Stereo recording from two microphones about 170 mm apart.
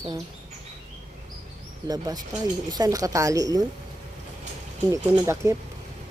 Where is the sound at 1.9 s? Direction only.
25° right (ahead or behind).